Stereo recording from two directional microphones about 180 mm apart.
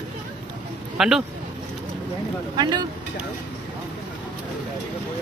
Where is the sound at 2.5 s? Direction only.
25° right (ahead or behind).